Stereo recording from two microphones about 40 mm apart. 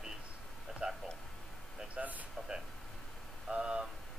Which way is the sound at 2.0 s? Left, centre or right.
Right.